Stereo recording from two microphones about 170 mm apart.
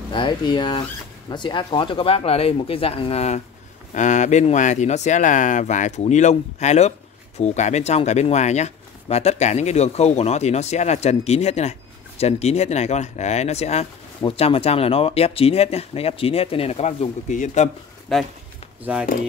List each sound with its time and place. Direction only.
0.1 s speech: 25° left (ahead or behind); by 17.6 s 45° left (ahead or behind)
18.1 s speech: centre (ahead or behind)